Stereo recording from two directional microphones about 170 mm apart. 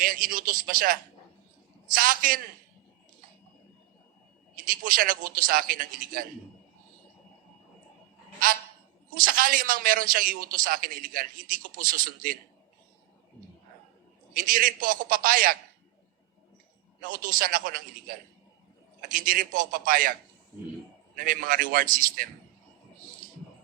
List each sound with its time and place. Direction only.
0.0 s a man's voice: 55° right (ahead or behind)
2.0 s a man's voice: 55° right (ahead or behind)
4.5 s a man's voice: 55° right (ahead or behind)
8.4 s a man's voice: 55° right (ahead or behind)
14.3 s a man's voice: 55° right (ahead or behind)
17.0 s a man's voice: 55° right (ahead or behind)
19.1 s a man's voice: 55° right (ahead or behind)
21.2 s a man's voice: 55° right (ahead or behind)